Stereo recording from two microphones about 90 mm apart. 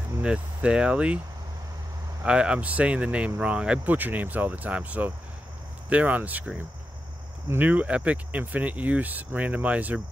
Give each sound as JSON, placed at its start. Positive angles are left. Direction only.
{"t": 0.2, "sound": "speech", "side_deg": -10}
{"t": 2.2, "sound": "speech", "side_deg": -10}
{"t": 7.4, "sound": "speech", "side_deg": -20}